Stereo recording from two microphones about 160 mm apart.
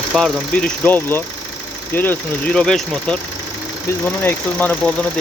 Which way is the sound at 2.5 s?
5° left (ahead or behind).